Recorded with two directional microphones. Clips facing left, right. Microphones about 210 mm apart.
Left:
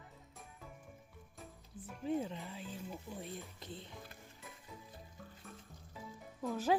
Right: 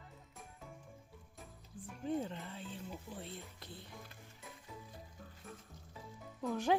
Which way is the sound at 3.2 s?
15° left (ahead or behind).